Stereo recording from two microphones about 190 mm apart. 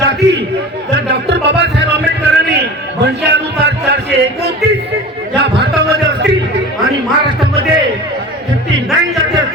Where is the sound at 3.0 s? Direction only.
65° right (ahead or behind).